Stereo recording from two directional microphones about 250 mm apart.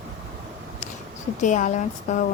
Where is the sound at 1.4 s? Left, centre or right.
Left.